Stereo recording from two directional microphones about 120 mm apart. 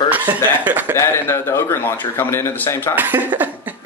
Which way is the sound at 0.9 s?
20° left (ahead or behind).